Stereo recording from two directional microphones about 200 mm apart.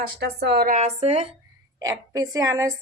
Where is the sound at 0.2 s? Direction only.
55° right (ahead or behind); by 1.3 s 30° right (ahead or behind).